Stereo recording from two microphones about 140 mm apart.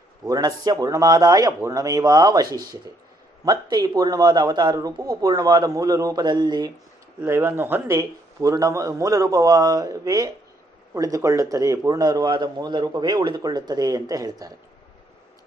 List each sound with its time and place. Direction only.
0.2 s a man's voice: 25° right (ahead or behind)
7.2 s a man's voice: 15° right (ahead or behind)